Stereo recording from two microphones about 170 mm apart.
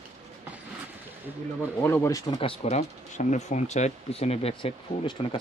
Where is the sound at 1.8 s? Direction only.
15° left (ahead or behind).